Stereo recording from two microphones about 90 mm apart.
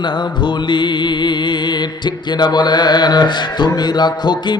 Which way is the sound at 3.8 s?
55° left (ahead or behind).